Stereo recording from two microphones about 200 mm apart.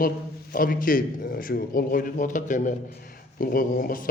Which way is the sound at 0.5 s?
45° left (ahead or behind).